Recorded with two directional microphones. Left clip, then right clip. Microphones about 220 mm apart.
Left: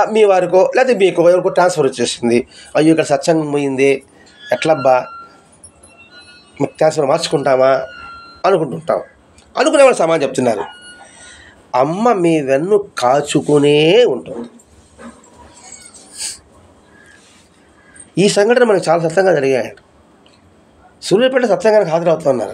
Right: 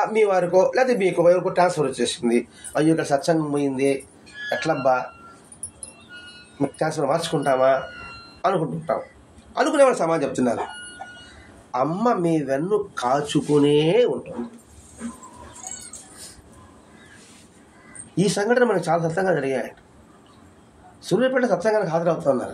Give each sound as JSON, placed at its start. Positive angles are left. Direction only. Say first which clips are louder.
{"t": 0.0, "sound": "speech", "louder": "left 8 dB", "side_deg": 30}
{"t": 6.8, "sound": "speech", "louder": "left 10 dB", "side_deg": 30}
{"t": 11.7, "sound": "speech", "louder": "left 8 dB", "side_deg": 35}
{"t": 18.1, "sound": "speech", "louder": "left 9 dB", "side_deg": 30}
{"t": 21.0, "sound": "speech", "louder": "left 8 dB", "side_deg": 30}